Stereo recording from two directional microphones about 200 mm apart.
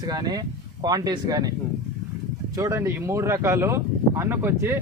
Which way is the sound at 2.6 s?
15° right (ahead or behind).